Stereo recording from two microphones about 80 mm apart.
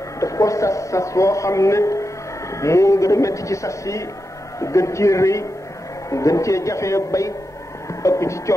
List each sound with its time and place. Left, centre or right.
0.2 s a man's voice: left